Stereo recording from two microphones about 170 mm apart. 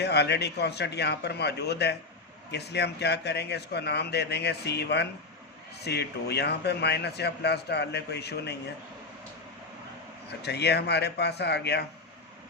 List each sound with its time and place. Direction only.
0.0 s speech: 80° left
10.2 s speech: 75° left (ahead or behind)